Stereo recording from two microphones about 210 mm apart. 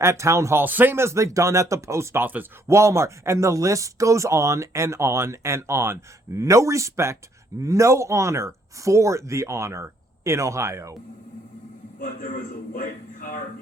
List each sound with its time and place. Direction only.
0.0 s speech: 15° right (ahead or behind)
12.7 s speech: 40° left (ahead or behind)